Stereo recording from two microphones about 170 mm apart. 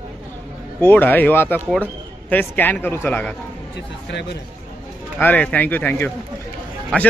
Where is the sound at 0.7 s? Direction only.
10° left (ahead or behind).